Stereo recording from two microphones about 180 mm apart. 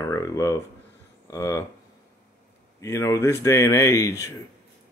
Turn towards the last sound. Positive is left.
turn(degrees=15)  # may be behind; listen again after turning